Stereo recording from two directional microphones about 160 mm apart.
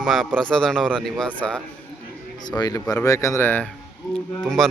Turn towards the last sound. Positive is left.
turn(degrees=0)  # may be behind; listen again after turning